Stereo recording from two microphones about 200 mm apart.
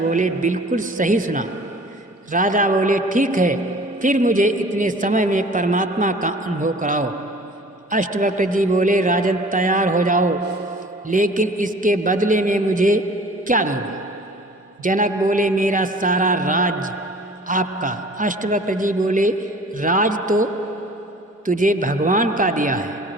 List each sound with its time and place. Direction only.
0.1 s a man's voice: 40° right (ahead or behind)
14.8 s a man's voice: 40° right (ahead or behind)